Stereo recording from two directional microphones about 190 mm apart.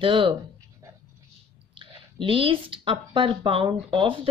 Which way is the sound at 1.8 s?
25° right (ahead or behind).